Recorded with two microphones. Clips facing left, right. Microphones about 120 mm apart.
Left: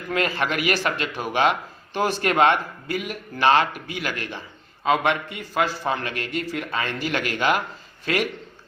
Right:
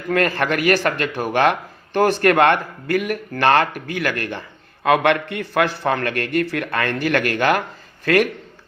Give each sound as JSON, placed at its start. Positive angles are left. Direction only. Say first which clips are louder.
{"t": 0.1, "sound": "a man's voice", "louder": "right 5 dB", "side_deg": -50}